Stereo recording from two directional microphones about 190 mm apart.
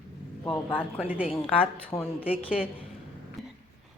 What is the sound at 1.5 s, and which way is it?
Speech, 30° left (ahead or behind).